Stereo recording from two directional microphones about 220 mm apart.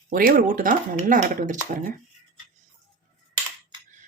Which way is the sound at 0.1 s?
40° right (ahead or behind).